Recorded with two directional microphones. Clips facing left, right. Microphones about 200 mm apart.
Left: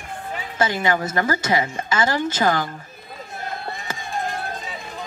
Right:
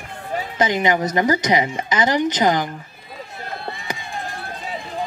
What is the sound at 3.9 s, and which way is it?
Run, 15° right (ahead or behind).